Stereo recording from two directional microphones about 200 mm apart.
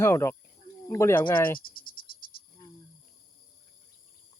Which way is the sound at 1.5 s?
45° left (ahead or behind).